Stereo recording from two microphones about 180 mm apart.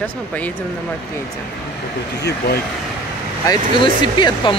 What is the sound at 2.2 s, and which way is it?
Speech, 65° left (ahead or behind).